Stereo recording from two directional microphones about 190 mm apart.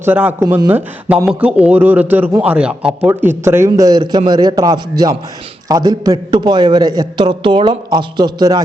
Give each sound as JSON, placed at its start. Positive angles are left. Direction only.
{"t": 0.0, "sound": "a man's voice", "side_deg": -10}